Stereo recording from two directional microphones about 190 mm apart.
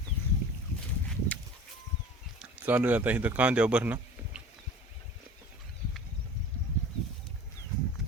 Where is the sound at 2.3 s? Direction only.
10° right (ahead or behind).